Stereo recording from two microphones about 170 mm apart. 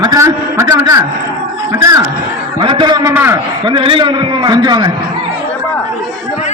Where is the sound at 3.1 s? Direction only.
15° right (ahead or behind).